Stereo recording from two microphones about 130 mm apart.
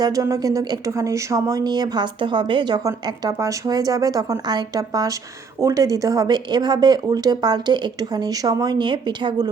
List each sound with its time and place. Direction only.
0.0 s a woman's voice: 25° right (ahead or behind)